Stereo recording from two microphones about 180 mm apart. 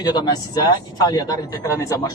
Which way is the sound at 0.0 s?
20° left (ahead or behind).